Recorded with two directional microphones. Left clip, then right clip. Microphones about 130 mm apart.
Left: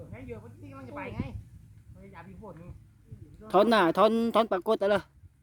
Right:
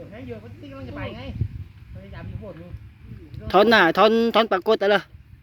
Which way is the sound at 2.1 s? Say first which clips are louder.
Right 7 dB; 20° left (ahead or behind).